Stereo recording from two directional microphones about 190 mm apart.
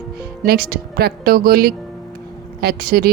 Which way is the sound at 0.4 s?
50° right (ahead or behind).